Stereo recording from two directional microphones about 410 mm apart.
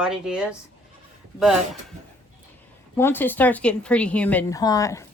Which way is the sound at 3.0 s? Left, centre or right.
Centre.